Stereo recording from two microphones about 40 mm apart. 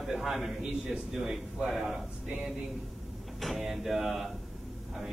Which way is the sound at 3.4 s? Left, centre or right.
Centre.